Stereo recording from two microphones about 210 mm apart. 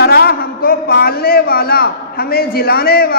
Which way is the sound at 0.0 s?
50° left (ahead or behind).